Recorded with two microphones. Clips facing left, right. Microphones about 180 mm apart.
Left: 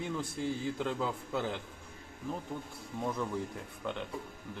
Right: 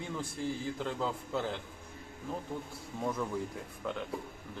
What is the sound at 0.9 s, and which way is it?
Speech, 5° left (ahead or behind).